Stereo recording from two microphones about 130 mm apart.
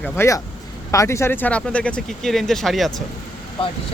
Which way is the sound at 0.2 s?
20° left (ahead or behind).